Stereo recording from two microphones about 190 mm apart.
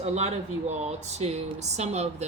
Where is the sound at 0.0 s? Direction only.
35° right (ahead or behind).